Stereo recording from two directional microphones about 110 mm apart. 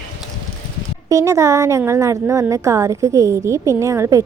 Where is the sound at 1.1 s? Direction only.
30° right (ahead or behind).